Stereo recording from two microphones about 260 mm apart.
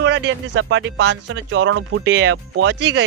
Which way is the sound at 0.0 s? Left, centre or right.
Right.